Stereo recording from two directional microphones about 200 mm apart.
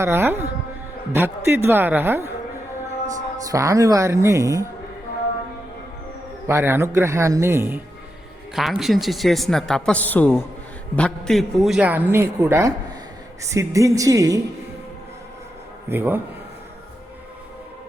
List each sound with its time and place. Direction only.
0.0 s a man's voice: 10° right (ahead or behind)
3.4 s a man's voice: 15° right (ahead or behind)
6.5 s a man's voice: 10° right (ahead or behind)
8.5 s a man's voice: centre (ahead or behind); by 14.4 s 15° right (ahead or behind)
15.9 s a man's voice: 10° right (ahead or behind)